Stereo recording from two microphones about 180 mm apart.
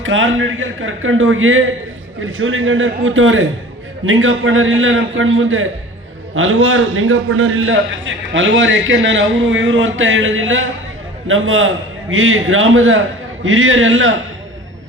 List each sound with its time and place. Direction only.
0.0 s a man's voice: 90° right